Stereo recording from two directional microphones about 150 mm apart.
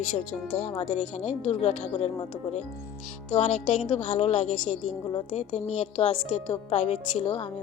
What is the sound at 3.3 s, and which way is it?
A woman's voice, 50° left (ahead or behind).